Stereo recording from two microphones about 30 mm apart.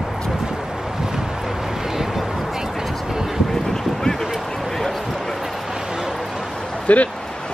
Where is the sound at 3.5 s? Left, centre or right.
Centre.